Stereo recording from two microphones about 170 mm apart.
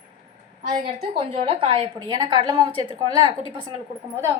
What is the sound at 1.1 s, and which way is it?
A woman's voice, 35° right (ahead or behind).